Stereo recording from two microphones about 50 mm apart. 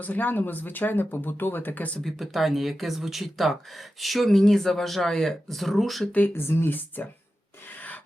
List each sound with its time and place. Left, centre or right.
0.0 s speech: left
2.0 s speech: centre
6.1 s speech: left
6.3 s speech: left